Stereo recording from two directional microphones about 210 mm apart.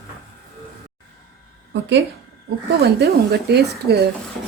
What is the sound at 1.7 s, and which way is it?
Speech, 55° right (ahead or behind).